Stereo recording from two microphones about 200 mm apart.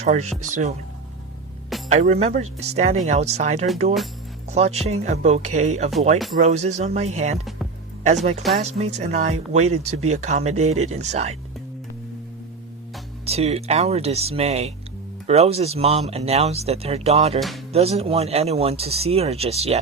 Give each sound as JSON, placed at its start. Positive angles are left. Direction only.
{"t": 0.0, "sound": "speech", "side_deg": -35}
{"t": 1.9, "sound": "speech", "side_deg": -35}
{"t": 13.2, "sound": "speech", "side_deg": -30}